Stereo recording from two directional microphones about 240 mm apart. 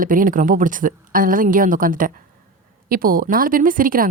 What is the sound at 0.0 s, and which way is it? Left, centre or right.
Speech, right.